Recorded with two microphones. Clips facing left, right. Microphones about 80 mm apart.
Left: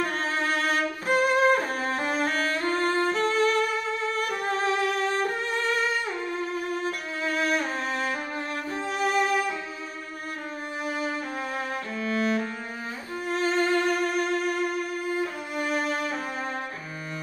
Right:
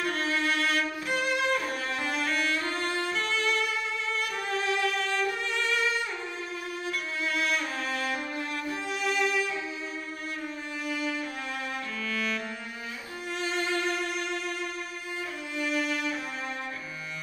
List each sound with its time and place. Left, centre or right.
0.0 s violin: left
6.5 s music: left
10.9 s music: left